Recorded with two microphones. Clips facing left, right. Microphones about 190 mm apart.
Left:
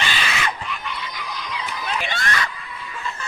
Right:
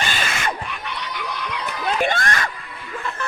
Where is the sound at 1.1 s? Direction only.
60° right (ahead or behind).